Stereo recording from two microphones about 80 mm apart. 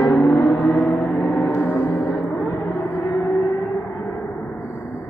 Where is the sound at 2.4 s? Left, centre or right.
Left.